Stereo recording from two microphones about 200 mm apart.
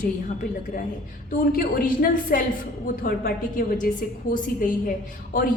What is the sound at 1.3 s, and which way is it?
A woman's voice, 45° left (ahead or behind).